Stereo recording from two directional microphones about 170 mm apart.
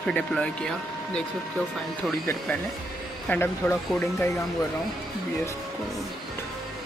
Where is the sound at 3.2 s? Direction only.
10° left (ahead or behind).